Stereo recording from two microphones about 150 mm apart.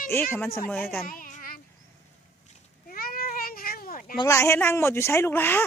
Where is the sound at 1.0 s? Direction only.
65° left (ahead or behind).